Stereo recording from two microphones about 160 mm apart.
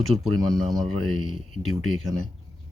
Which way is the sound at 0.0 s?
Centre (ahead or behind).